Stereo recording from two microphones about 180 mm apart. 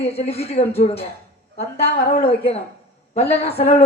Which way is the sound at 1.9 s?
50° left (ahead or behind).